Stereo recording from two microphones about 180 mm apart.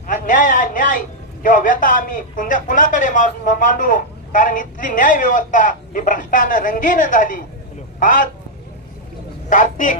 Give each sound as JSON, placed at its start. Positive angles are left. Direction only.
{"t": 0.0, "sound": "a man's voice", "side_deg": 45}
{"t": 9.5, "sound": "a man's voice", "side_deg": 45}